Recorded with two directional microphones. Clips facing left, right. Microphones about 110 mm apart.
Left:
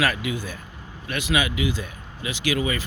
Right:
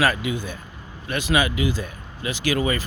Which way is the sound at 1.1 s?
35° right (ahead or behind).